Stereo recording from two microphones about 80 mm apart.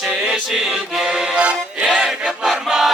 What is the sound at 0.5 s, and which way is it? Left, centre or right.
Music, centre.